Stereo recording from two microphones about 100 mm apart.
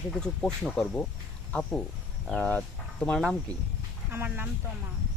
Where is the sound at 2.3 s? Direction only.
10° left (ahead or behind).